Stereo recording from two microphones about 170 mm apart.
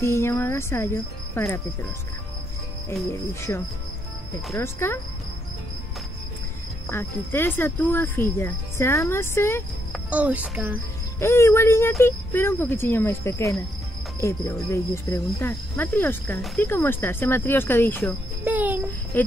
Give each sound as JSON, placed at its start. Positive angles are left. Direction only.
{"t": 0.0, "sound": "speech", "side_deg": 15}
{"t": 2.9, "sound": "speech", "side_deg": 15}
{"t": 6.9, "sound": "speech", "side_deg": 15}
{"t": 10.0, "sound": "speech", "side_deg": -10}
{"t": 11.1, "sound": "speech", "side_deg": 15}
{"t": 18.4, "sound": "a sound", "side_deg": -10}
{"t": 19.1, "sound": "cricket", "side_deg": 10}